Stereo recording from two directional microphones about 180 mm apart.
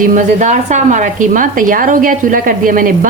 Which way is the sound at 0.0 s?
45° right (ahead or behind).